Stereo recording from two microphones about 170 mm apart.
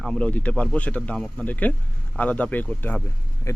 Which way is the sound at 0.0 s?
5° left (ahead or behind).